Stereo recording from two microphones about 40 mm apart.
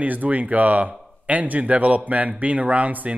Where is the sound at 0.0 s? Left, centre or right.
Right.